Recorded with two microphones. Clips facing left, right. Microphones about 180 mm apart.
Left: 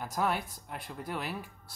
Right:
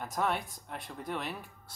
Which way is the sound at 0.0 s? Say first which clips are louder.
Left 1 dB; 5° left (ahead or behind).